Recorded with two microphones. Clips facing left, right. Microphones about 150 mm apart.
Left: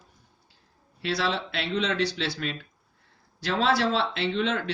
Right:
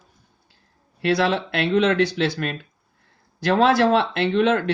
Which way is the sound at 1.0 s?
55° right (ahead or behind).